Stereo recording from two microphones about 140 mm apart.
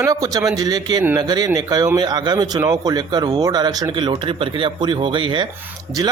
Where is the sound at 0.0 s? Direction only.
25° right (ahead or behind).